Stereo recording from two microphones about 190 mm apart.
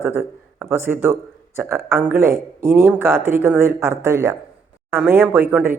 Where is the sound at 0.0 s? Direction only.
15° right (ahead or behind).